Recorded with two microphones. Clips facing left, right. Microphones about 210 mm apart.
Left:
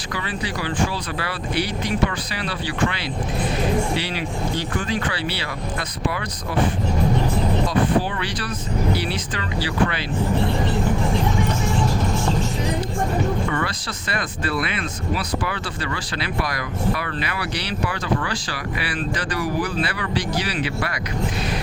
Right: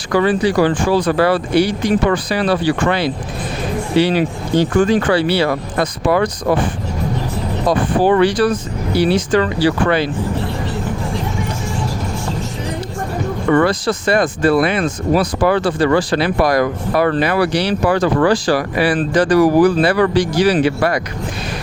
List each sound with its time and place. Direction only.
0.1 s speech: 50° right (ahead or behind)
4.0 s speech: 50° right (ahead or behind)
7.7 s speech: 55° right (ahead or behind)
13.5 s speech: 45° right (ahead or behind)